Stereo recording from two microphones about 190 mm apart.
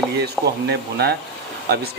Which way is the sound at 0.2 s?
60° right (ahead or behind).